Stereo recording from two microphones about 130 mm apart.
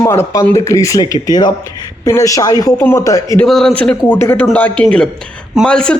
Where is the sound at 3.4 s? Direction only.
5° left (ahead or behind).